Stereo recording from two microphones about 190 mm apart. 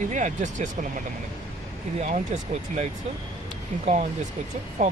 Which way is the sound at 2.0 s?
40° right (ahead or behind).